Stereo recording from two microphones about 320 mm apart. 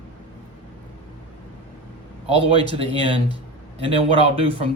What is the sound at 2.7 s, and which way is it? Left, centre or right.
Speech, centre.